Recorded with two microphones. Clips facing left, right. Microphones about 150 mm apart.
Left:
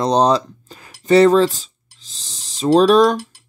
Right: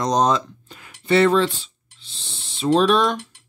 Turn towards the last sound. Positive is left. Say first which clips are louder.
# left 6 dB
turn(degrees=40)  # may be behind; listen again after turning